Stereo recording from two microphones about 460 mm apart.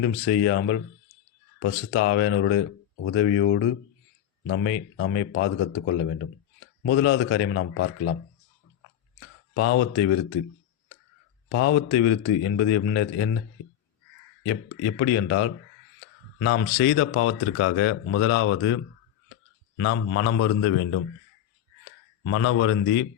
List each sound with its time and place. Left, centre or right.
0.0 s speech: left
9.6 s speech: left
11.4 s speech: left
14.4 s speech: left
22.3 s speech: left